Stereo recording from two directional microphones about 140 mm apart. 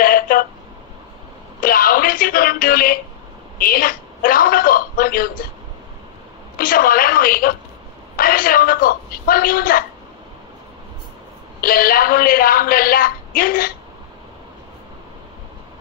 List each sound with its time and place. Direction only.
0.0 s a sound: 90° left
1.6 s speech: 90° left
6.6 s speech: 90° left
11.6 s speech: 90° left